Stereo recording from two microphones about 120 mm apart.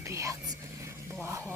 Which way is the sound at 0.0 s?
25° right (ahead or behind).